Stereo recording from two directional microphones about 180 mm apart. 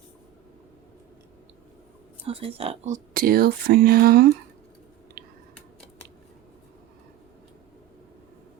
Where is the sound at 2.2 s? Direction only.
35° right (ahead or behind); by 4.3 s 60° right (ahead or behind).